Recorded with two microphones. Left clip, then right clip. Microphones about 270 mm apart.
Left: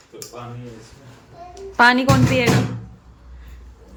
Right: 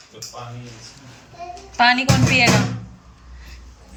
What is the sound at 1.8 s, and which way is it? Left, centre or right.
Speech, centre.